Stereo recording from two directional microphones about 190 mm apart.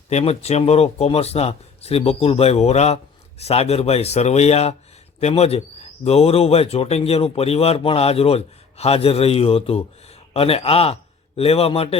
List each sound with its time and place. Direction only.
0.1 s a man's voice: 35° left (ahead or behind)